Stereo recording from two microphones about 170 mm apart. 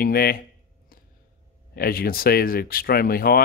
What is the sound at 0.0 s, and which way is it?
Speech, 60° left (ahead or behind).